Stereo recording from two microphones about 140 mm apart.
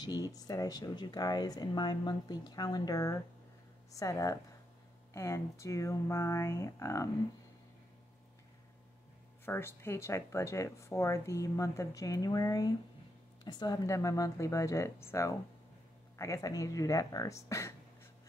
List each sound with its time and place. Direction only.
0.0 s speech: 25° left (ahead or behind)
9.5 s speech: 15° left (ahead or behind)